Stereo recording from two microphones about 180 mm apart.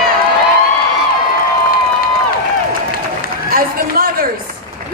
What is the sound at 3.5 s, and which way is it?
Run, 55° right (ahead or behind).